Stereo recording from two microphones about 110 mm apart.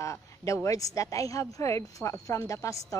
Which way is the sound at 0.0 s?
25° left (ahead or behind).